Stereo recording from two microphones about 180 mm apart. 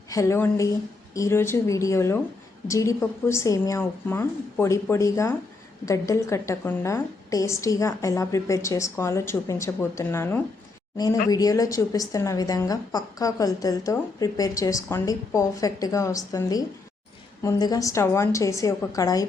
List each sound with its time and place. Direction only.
0.1 s a woman's voice: 15° left (ahead or behind)